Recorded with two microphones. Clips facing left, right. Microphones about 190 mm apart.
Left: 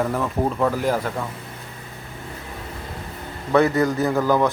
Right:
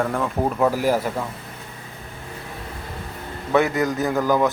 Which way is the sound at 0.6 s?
5° right (ahead or behind).